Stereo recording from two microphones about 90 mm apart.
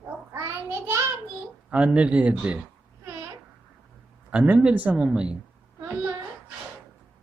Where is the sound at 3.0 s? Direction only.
30° right (ahead or behind).